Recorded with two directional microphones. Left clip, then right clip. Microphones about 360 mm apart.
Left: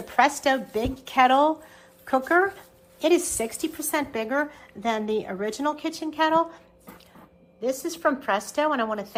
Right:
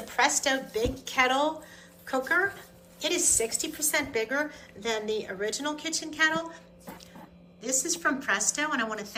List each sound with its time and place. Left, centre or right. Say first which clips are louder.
0.1 s a woman's voice: left 5 dB; centre
7.6 s a woman's voice: left 4 dB; centre